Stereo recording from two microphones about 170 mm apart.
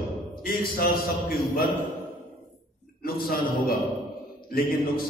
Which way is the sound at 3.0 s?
60° left (ahead or behind).